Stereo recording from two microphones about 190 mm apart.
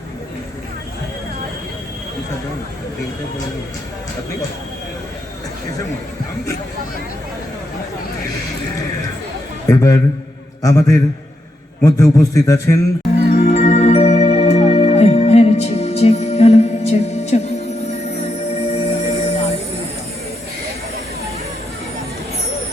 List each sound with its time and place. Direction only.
9.6 s a man's voice: 15° left (ahead or behind)
13.4 s music: 35° left (ahead or behind)